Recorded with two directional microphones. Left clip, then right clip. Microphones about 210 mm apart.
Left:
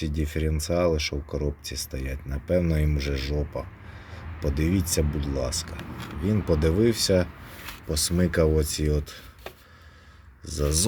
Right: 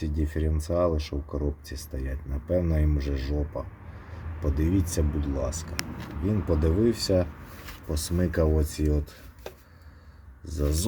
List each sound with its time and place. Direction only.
0.0 s speech: 25° left (ahead or behind)
10.4 s speech: 25° left (ahead or behind)